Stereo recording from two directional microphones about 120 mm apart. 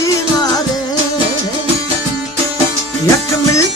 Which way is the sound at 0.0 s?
30° left (ahead or behind).